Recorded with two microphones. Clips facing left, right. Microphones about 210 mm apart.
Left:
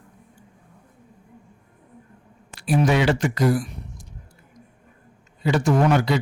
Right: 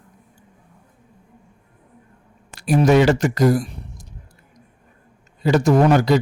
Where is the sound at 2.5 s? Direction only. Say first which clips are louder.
Right 5 dB; 40° right (ahead or behind).